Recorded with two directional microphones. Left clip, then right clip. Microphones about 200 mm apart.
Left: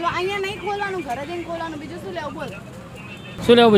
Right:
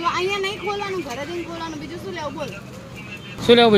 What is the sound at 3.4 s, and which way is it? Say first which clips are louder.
Speech: even; 10° left (ahead or behind).